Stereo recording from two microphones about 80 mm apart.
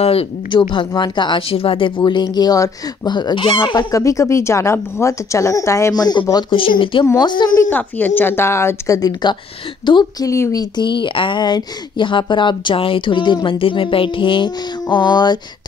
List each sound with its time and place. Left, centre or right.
0.5 s speech: left
2.2 s fowl: left
3.9 s a woman's voice: left
5.9 s fowl: left
6.5 s a woman's voice: left
7.2 s speech: left
7.7 s a woman's voice: left
9.9 s a woman's voice: left
10.2 s speech: left
10.6 s a woman's voice: left